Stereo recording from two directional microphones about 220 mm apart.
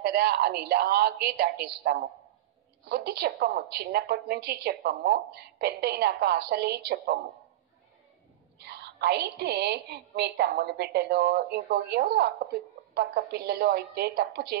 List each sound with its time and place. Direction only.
0.0 s a woman's voice: 45° right (ahead or behind)
8.5 s a woman's voice: 45° right (ahead or behind)